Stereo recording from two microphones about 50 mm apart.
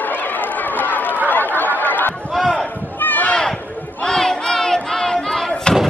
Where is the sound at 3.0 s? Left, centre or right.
Left.